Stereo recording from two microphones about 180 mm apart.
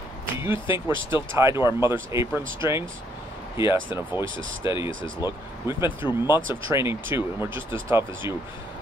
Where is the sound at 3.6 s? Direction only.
15° right (ahead or behind).